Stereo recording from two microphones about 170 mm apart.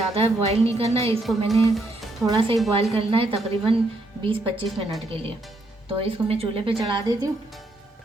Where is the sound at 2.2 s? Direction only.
30° right (ahead or behind).